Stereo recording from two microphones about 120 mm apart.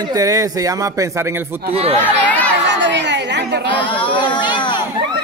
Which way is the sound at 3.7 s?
45° left (ahead or behind).